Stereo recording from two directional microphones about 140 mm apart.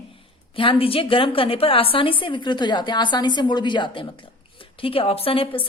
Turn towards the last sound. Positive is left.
turn(degrees=40)  # may be behind; listen again after turning